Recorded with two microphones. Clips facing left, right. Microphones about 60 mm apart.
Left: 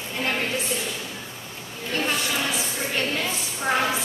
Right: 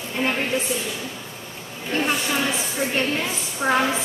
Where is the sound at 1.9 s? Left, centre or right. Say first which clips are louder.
Right 3 dB; centre.